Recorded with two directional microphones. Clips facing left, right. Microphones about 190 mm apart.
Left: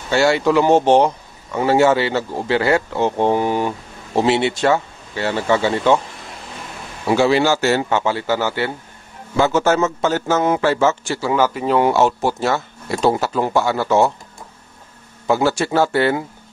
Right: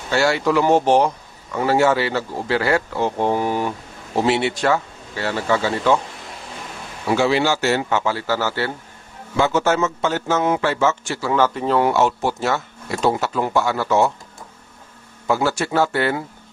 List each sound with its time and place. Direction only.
0.1 s speech: 25° left (ahead or behind)
7.2 s speech: 45° left (ahead or behind)
7.9 s speech: 25° left (ahead or behind)
9.4 s speech: 40° left (ahead or behind)
11.3 s speech: 10° left (ahead or behind)
11.9 s speech: 35° left (ahead or behind)
15.2 s speech: 25° left (ahead or behind)